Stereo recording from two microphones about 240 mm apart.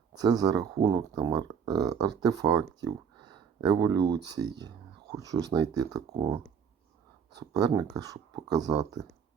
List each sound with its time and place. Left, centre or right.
0.1 s speech: centre
7.3 s speech: centre